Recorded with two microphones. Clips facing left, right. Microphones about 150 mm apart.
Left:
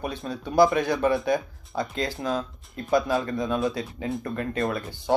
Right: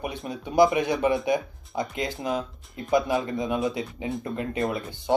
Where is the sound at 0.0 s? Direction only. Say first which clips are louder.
Left 1 dB; 20° right (ahead or behind).